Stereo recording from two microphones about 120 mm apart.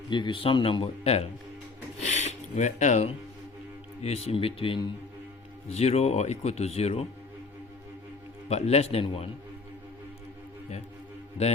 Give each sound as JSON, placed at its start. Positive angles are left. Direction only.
{"t": 0.1, "sound": "speech", "side_deg": 40}
{"t": 2.0, "sound": "speech", "side_deg": 75}
{"t": 4.0, "sound": "speech", "side_deg": 60}
{"t": 5.6, "sound": "speech", "side_deg": 60}
{"t": 8.4, "sound": "speech", "side_deg": 65}
{"t": 11.4, "sound": "speech", "side_deg": 65}